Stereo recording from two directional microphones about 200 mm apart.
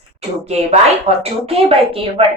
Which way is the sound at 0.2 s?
30° right (ahead or behind).